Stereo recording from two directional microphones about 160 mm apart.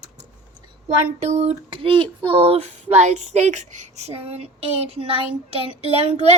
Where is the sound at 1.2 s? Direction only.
45° right (ahead or behind).